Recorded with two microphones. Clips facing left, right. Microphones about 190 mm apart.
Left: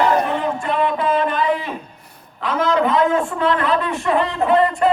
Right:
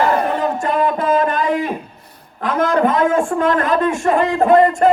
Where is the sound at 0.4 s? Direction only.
40° right (ahead or behind).